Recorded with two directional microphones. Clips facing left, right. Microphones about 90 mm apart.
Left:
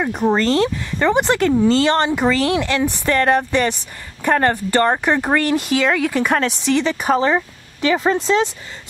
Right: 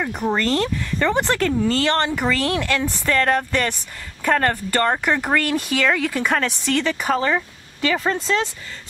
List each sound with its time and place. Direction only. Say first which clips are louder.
0.0 s speech: left 4 dB; 20° left (ahead or behind)